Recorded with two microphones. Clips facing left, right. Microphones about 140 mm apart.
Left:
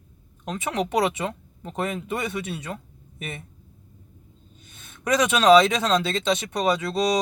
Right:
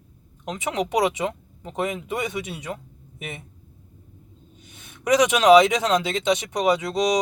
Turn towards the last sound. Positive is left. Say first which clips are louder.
# right 2 dB
turn(degrees=-15)  # may be behind; listen again after turning